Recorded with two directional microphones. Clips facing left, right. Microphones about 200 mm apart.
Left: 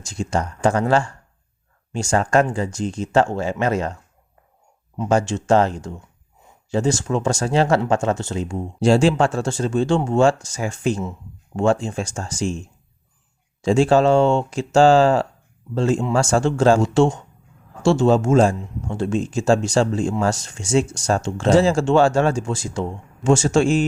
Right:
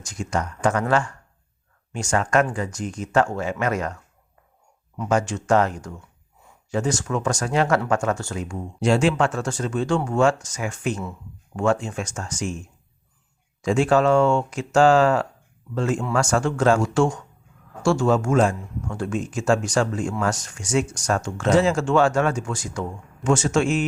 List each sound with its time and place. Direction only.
0.0 s speech: 25° left (ahead or behind)
4.9 s speech: 30° left (ahead or behind)